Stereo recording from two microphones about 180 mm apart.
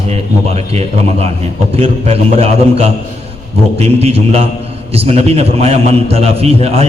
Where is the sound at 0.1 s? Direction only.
35° right (ahead or behind).